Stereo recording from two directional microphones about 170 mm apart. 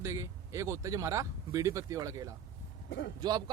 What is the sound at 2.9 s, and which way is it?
Speech, 90° left.